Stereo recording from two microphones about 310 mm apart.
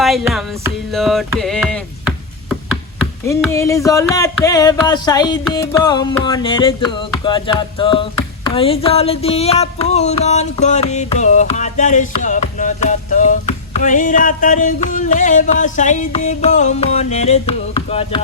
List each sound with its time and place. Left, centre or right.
0.0 s music: centre
3.2 s a sound: centre
8.4 s music: centre